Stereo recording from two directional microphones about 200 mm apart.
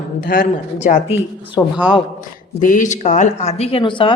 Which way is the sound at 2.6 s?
40° left (ahead or behind).